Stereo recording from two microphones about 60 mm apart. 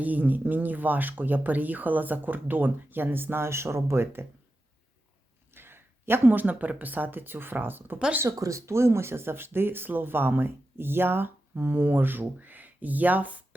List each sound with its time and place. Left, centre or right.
0.0 s speech: right
5.5 s speech: right
8.4 s speech: right